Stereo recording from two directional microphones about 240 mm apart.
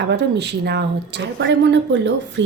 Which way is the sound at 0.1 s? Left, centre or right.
Right.